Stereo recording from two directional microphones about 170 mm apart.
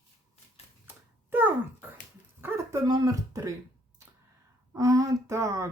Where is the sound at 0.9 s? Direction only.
10° right (ahead or behind).